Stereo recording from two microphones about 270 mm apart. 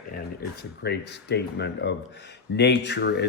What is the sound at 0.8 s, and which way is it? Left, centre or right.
Speech, left.